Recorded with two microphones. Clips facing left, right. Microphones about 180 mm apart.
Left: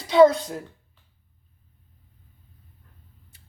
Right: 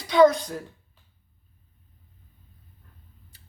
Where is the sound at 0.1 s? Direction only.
25° left (ahead or behind).